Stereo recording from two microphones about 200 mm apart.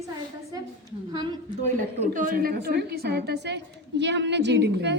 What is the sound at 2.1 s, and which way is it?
A woman's voice, 45° right (ahead or behind).